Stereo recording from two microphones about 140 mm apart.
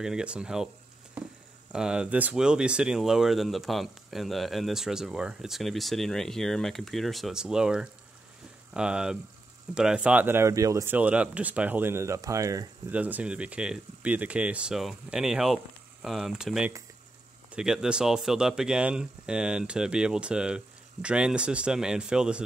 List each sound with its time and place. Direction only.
0.0 s speech: 5° right (ahead or behind)
1.7 s speech: 5° right (ahead or behind); by 11.0 s 20° right (ahead or behind)
11.0 s speech: 10° right (ahead or behind)
12.9 s speech: 10° right (ahead or behind)